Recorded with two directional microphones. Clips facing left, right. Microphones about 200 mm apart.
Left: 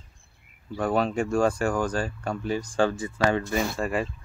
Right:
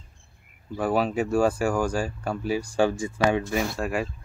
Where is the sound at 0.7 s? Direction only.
5° right (ahead or behind).